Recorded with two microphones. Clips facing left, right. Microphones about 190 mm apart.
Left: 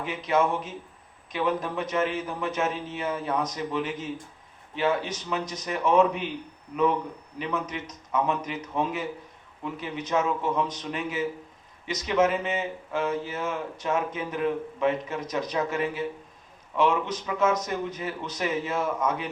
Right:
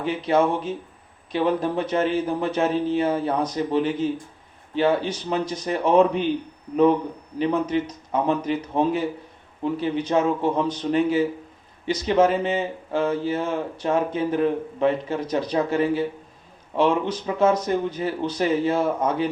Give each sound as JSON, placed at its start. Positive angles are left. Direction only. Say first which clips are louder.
{"t": 0.0, "sound": "speech", "louder": "right 4 dB", "side_deg": -30}
{"t": 7.3, "sound": "speech", "louder": "right 9 dB", "side_deg": -30}